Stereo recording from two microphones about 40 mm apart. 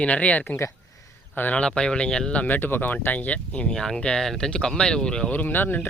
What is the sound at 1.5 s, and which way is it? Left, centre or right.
Speech, left.